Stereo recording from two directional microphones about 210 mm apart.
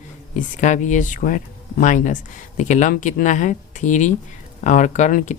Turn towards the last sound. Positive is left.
turn(degrees=35)  # may be behind; listen again after turning